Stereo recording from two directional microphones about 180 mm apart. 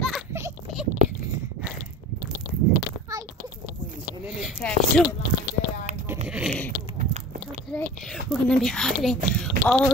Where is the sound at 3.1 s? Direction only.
15° right (ahead or behind).